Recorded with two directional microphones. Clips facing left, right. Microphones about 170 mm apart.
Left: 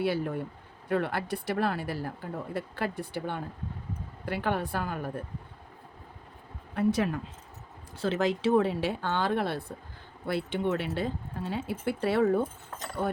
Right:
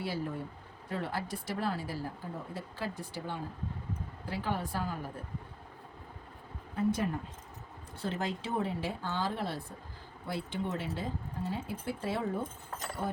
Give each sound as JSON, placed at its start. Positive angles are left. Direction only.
{"t": 0.0, "sound": "speech", "side_deg": 65}
{"t": 6.7, "sound": "speech", "side_deg": 80}